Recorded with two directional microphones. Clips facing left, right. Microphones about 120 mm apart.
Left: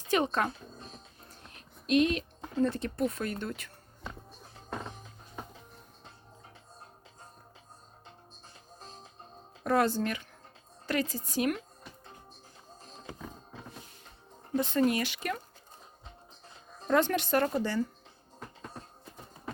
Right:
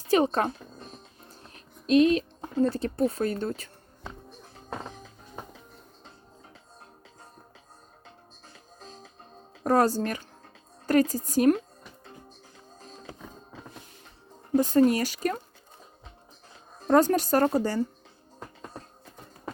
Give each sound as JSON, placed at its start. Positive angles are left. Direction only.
{"t": 0.1, "sound": "speech", "side_deg": -35}
{"t": 9.6, "sound": "a woman's voice", "side_deg": -40}
{"t": 14.5, "sound": "speech", "side_deg": -40}
{"t": 16.8, "sound": "speech", "side_deg": -35}